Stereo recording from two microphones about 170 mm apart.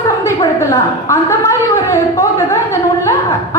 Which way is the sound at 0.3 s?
15° left (ahead or behind).